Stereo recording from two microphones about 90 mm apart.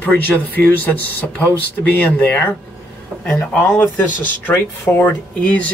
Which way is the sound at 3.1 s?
10° right (ahead or behind).